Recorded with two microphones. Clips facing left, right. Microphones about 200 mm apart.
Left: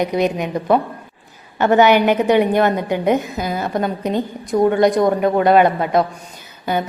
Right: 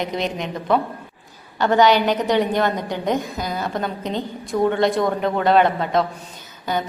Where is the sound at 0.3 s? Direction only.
10° left (ahead or behind).